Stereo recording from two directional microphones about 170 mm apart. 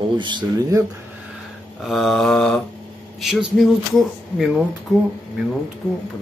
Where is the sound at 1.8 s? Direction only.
Centre (ahead or behind).